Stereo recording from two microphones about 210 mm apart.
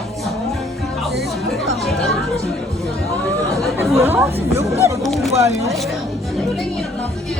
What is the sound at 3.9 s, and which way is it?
Speech, 10° right (ahead or behind).